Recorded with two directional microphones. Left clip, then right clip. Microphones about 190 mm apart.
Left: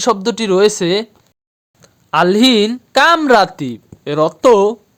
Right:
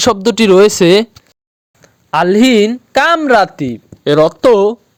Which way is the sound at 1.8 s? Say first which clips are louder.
Even; 10° right (ahead or behind).